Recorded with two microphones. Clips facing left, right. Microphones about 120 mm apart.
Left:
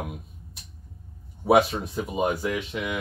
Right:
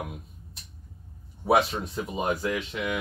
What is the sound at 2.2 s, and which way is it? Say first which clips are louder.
Speech: left 2 dB; centre (ahead or behind).